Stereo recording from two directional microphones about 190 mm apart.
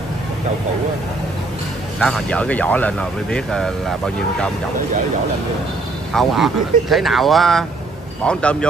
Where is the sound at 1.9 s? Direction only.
5° left (ahead or behind).